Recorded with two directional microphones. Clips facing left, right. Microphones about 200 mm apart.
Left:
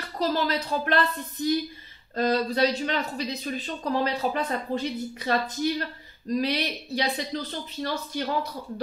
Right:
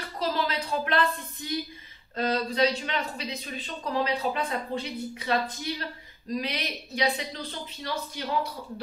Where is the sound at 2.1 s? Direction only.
40° left (ahead or behind).